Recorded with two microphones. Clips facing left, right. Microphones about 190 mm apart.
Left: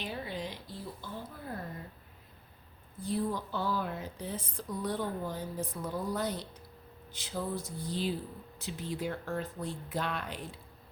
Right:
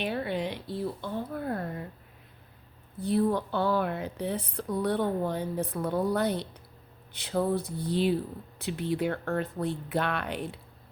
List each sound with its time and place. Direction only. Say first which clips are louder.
0.0 s speech: right 8 dB; 65° right (ahead or behind)
3.0 s a woman's voice: right 7 dB; 65° right (ahead or behind)